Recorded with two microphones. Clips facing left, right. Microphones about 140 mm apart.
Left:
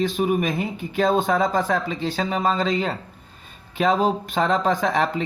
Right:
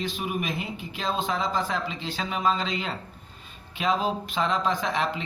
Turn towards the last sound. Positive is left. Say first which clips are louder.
# left 6 dB
turn(degrees=50)  # may be behind; listen again after turning